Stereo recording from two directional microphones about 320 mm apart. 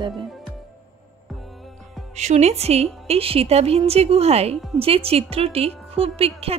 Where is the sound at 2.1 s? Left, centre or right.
Right.